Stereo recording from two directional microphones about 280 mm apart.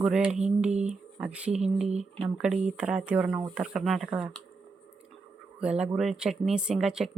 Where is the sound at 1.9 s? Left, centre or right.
Right.